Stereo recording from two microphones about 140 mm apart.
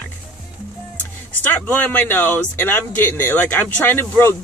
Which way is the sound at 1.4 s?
10° left (ahead or behind).